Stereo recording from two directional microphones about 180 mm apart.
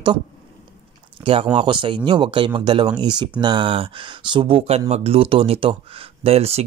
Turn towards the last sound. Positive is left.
turn(degrees=-35)  # may be behind; listen again after turning